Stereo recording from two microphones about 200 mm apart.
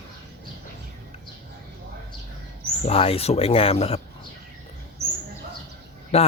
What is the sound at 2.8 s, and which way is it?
Speech, 30° left (ahead or behind).